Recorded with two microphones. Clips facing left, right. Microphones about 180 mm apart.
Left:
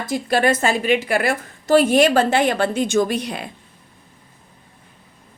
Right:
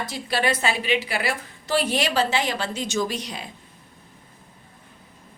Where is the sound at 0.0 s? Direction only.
50° left (ahead or behind).